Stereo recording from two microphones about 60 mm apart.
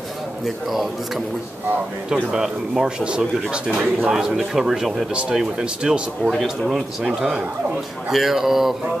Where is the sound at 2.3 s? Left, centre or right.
Centre.